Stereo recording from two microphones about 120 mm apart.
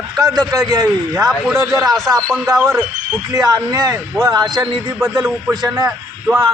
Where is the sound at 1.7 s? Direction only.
30° right (ahead or behind).